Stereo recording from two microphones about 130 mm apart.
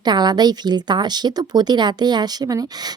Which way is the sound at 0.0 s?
35° right (ahead or behind).